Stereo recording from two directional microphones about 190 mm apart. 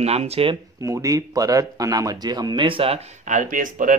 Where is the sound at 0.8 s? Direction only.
20° right (ahead or behind).